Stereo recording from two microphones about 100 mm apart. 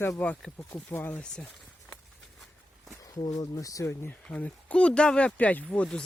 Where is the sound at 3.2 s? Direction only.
35° left (ahead or behind).